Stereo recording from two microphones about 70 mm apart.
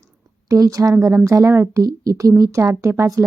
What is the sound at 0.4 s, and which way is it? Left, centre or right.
Speech, right.